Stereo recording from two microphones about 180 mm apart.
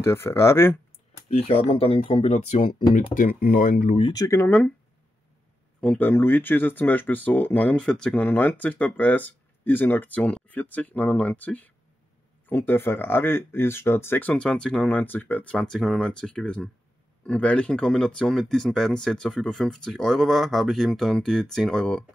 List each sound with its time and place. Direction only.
0.0 s speech: 15° left (ahead or behind)
1.3 s speech: 30° left (ahead or behind); by 4.0 s 50° left (ahead or behind)
4.0 s speech: 20° left (ahead or behind)
5.8 s speech: 10° left (ahead or behind)